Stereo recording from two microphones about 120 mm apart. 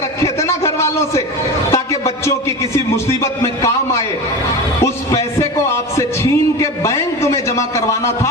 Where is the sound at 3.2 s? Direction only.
25° left (ahead or behind).